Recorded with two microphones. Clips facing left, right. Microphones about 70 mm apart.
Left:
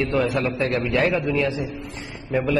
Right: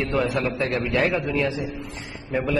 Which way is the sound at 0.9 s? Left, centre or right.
Centre.